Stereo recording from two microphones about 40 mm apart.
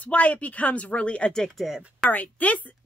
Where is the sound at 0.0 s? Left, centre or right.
Left.